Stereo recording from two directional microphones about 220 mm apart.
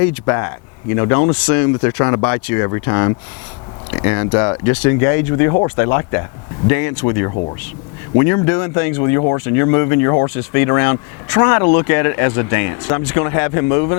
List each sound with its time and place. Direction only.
0.0 s speech: 15° left (ahead or behind)